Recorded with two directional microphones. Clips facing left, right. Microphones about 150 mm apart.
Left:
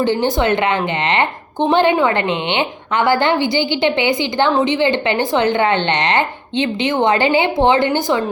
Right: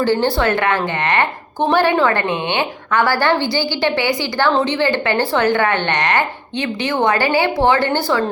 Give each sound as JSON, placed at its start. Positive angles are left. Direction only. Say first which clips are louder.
{"t": 0.0, "sound": "a woman's voice", "louder": "even", "side_deg": 20}